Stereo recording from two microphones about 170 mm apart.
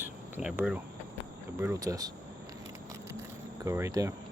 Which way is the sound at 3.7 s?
15° right (ahead or behind).